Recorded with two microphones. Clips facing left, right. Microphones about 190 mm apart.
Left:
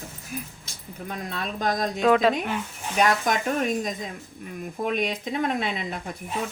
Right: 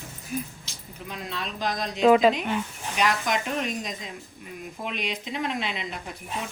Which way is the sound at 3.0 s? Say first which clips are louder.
Left 3 dB; 50° left (ahead or behind).